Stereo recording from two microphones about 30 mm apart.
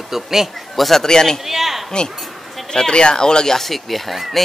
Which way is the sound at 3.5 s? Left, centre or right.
Centre.